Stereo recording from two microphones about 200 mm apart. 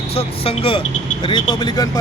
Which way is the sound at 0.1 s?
30° left (ahead or behind).